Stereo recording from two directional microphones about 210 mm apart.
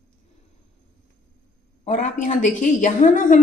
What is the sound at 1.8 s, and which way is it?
A woman's voice, 35° left (ahead or behind).